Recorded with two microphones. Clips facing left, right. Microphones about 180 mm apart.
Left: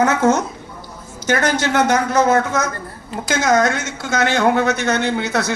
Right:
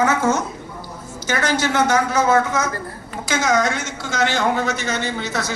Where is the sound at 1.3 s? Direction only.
60° left (ahead or behind).